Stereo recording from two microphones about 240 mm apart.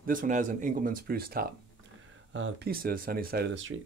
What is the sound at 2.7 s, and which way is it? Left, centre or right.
Speech, right.